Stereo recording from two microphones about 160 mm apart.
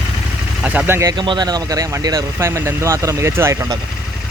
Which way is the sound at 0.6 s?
10° right (ahead or behind).